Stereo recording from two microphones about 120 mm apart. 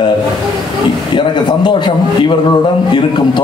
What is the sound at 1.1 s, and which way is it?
A man's voice, 40° left (ahead or behind).